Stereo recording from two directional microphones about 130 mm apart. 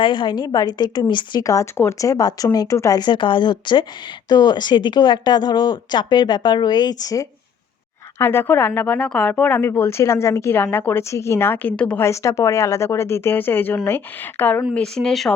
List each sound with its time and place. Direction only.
0.0 s a woman's voice: 35° left (ahead or behind)
8.2 s a woman's voice: 20° left (ahead or behind)
12.0 s a woman's voice: 20° left (ahead or behind)
14.7 s speech: 5° left (ahead or behind)